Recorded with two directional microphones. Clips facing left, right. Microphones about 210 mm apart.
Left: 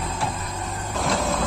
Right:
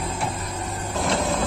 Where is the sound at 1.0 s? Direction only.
Centre (ahead or behind).